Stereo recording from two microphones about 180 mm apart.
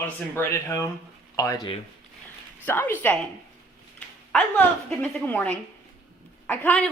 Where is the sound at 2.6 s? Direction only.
10° left (ahead or behind).